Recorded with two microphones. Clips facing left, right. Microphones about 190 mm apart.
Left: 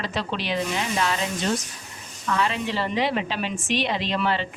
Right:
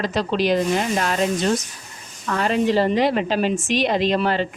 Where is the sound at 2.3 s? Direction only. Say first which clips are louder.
Right 6 dB; 45° right (ahead or behind).